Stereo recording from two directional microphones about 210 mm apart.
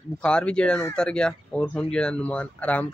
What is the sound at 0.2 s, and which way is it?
A child's voice, 5° left (ahead or behind).